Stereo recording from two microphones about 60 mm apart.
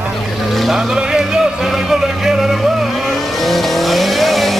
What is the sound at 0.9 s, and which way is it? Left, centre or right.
Music, centre.